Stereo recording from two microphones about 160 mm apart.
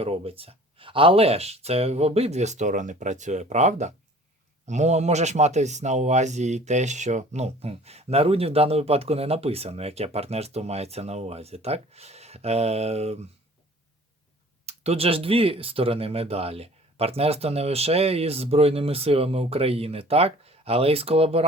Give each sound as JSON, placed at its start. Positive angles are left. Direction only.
{"t": 0.0, "sound": "speech", "side_deg": -35}
{"t": 14.7, "sound": "speech", "side_deg": -40}